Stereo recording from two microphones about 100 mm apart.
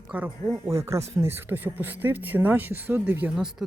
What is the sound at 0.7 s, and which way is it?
Speech, 30° right (ahead or behind).